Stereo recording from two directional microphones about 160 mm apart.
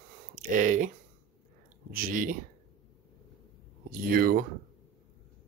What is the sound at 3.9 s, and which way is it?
Speech, 65° right (ahead or behind).